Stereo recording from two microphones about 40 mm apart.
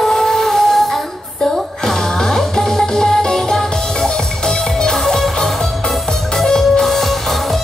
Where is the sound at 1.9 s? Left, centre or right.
Centre.